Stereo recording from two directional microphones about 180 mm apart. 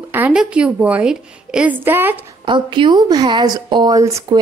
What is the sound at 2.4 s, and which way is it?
A woman's voice, 25° right (ahead or behind).